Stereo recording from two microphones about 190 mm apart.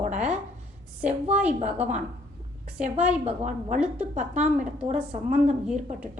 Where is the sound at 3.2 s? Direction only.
40° right (ahead or behind).